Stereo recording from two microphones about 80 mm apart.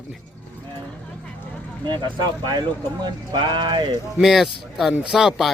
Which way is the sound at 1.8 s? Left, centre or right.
Right.